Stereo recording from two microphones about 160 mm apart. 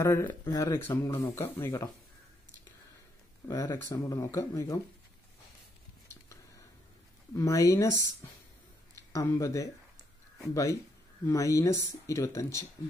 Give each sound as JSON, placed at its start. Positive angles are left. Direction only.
{"t": 0.0, "sound": "speech", "side_deg": 15}
{"t": 3.4, "sound": "speech", "side_deg": 20}
{"t": 6.0, "sound": "a sound", "side_deg": 20}
{"t": 7.3, "sound": "speech", "side_deg": 20}